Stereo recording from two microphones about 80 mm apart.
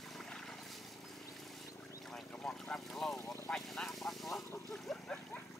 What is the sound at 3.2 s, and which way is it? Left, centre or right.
Vehicle, left.